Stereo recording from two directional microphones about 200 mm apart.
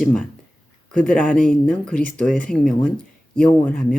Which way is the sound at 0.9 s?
5° left (ahead or behind).